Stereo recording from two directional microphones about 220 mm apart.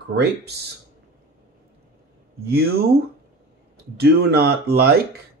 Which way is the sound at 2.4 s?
45° right (ahead or behind).